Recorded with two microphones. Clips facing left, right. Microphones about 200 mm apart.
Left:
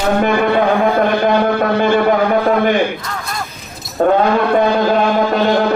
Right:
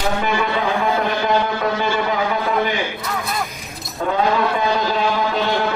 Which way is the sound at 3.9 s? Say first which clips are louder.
Left 6 dB; 55° left (ahead or behind).